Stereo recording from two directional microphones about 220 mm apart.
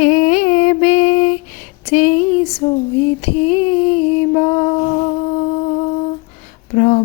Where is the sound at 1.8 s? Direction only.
30° left (ahead or behind).